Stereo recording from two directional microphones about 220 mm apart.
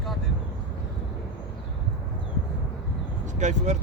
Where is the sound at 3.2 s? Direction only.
35° right (ahead or behind).